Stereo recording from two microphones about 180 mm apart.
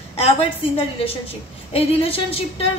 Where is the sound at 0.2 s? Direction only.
30° left (ahead or behind).